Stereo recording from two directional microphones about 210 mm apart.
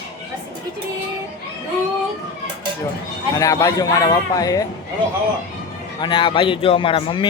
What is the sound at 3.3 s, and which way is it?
A man's voice, 15° left (ahead or behind).